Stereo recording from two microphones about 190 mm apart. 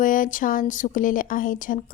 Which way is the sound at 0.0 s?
45° left (ahead or behind).